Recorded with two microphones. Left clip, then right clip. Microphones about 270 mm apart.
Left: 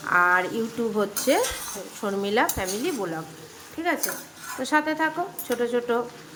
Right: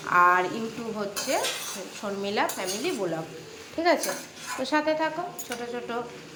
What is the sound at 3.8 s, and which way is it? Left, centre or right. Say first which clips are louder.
Speech: right 3 dB; centre.